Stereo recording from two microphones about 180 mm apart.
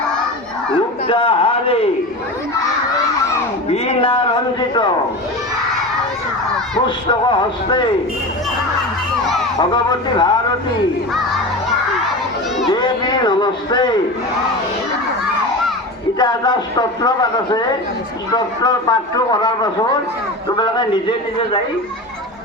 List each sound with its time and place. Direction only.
0.7 s a sound: 30° left (ahead or behind)
3.7 s a man's voice: 30° left (ahead or behind)
6.8 s a man's voice: 25° left (ahead or behind)
9.6 s a man's voice: 25° left (ahead or behind)
12.7 s a sound: 25° left (ahead or behind)
16.1 s a man's voice: 25° left (ahead or behind)
18.6 s a man's voice: 20° left (ahead or behind)